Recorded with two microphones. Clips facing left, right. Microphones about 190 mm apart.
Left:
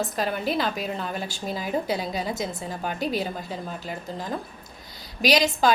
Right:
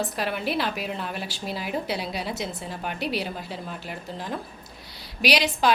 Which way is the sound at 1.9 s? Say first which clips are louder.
Left 2 dB; 45° left (ahead or behind).